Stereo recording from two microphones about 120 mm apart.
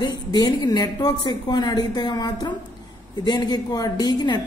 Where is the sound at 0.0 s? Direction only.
35° left (ahead or behind).